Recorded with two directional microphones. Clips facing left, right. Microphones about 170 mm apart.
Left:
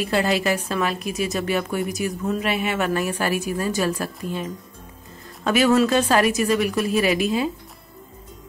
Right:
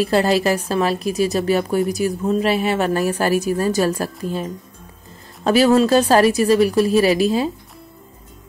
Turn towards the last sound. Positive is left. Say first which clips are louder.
# right 4 dB
turn(degrees=-35)  # may be behind; listen again after turning